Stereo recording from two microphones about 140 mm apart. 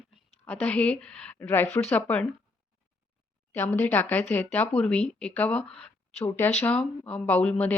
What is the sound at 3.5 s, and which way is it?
Speech, 15° left (ahead or behind).